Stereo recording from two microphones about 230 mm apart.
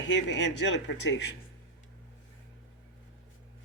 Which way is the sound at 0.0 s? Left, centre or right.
Left.